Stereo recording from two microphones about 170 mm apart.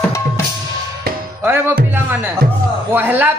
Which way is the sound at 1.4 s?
10° right (ahead or behind).